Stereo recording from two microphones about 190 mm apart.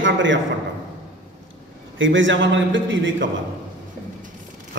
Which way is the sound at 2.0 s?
80° right.